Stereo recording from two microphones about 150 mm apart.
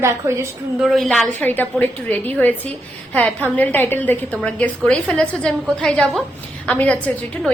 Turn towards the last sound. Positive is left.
turn(degrees=5)  # may be behind; listen again after turning